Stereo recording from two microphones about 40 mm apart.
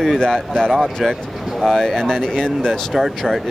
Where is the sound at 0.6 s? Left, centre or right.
Centre.